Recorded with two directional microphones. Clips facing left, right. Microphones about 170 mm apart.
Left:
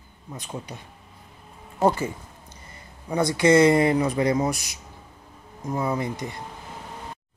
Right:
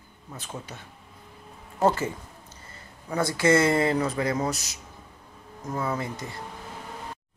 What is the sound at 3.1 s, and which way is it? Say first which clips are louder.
Speech: left 3 dB; 15° left (ahead or behind).